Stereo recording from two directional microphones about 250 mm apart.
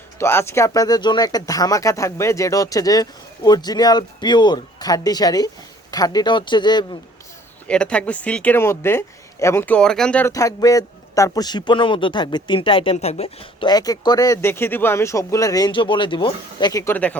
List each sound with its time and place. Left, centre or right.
0.2 s speech: centre
7.7 s speech: centre